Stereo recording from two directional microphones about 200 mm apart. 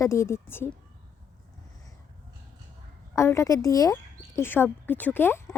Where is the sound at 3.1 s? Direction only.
15° left (ahead or behind).